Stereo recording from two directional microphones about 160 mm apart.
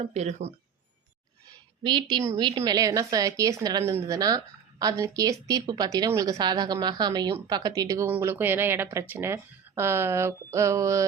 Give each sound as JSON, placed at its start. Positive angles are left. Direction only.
{"t": 0.0, "sound": "speech", "side_deg": -45}
{"t": 1.8, "sound": "a woman's voice", "side_deg": -30}